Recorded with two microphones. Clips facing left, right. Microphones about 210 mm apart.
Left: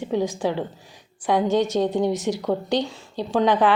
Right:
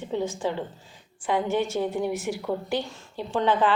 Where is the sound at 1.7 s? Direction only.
65° left (ahead or behind).